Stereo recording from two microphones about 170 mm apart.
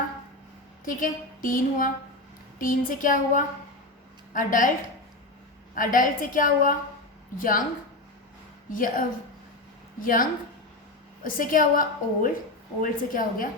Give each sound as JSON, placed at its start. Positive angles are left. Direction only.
{"t": 0.9, "sound": "a woman's voice", "side_deg": 50}
{"t": 5.7, "sound": "a woman's voice", "side_deg": 50}
{"t": 8.7, "sound": "a woman's voice", "side_deg": 55}